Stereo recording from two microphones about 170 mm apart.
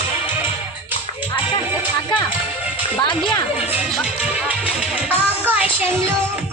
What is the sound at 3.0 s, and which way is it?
Speech, 30° left (ahead or behind).